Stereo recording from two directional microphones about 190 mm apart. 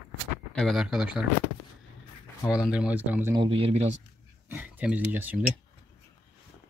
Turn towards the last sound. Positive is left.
turn(degrees=-10)  # may be behind; listen again after turning